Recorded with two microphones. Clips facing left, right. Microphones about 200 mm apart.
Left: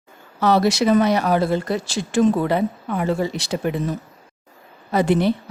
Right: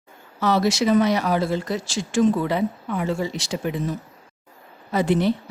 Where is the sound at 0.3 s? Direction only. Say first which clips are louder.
Left 3 dB; 60° left (ahead or behind).